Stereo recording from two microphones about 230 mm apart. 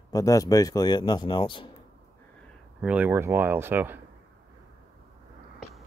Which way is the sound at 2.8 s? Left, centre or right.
Centre.